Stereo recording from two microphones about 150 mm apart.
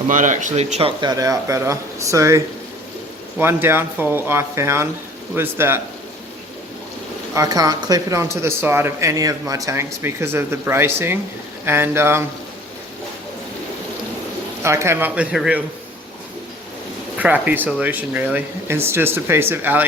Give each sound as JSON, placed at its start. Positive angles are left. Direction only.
{"t": 0.1, "sound": "speech", "side_deg": -55}
{"t": 1.1, "sound": "speech", "side_deg": -20}
{"t": 7.3, "sound": "speech", "side_deg": -25}
{"t": 14.6, "sound": "speech", "side_deg": -20}
{"t": 17.2, "sound": "speech", "side_deg": -10}